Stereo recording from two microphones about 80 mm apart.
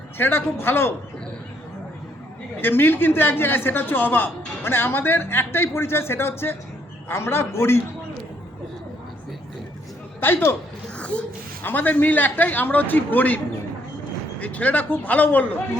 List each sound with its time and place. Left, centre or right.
0.2 s a man's voice: left
2.6 s a man's voice: left
10.2 s a man's voice: left
10.9 s a sound: centre
11.6 s a man's voice: left
14.4 s a man's voice: centre